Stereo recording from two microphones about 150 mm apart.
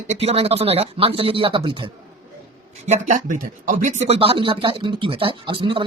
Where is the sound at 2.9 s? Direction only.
60° right (ahead or behind).